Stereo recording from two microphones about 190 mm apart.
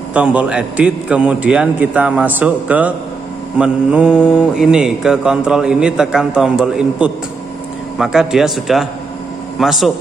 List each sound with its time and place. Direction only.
0.1 s a man's voice: 5° right (ahead or behind)
3.5 s mantra: 5° right (ahead or behind)